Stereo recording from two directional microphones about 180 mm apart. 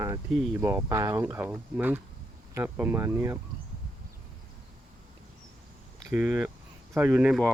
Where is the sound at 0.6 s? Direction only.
15° right (ahead or behind).